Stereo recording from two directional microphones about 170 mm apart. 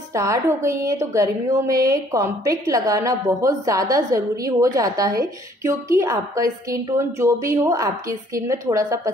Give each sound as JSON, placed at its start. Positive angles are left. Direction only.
{"t": 0.1, "sound": "a woman's voice", "side_deg": -20}